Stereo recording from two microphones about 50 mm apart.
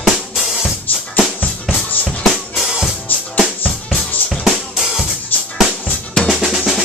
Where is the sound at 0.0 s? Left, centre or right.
Centre.